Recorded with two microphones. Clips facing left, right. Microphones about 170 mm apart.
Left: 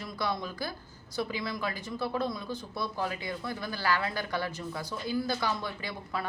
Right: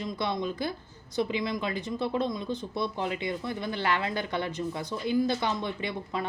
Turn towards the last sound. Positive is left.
turn(degrees=-20)  # may be behind; listen again after turning